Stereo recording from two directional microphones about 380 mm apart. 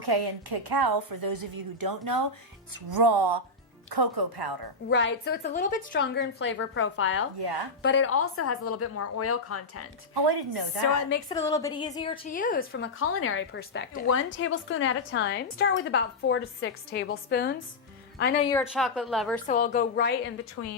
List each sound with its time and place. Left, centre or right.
0.0 s a woman's voice: right
2.9 s speech: right
4.9 s a woman's voice: left
10.2 s speech: right
11.3 s a woman's voice: centre; by 18.4 s left
18.5 s speech: centre
19.5 s a woman's voice: left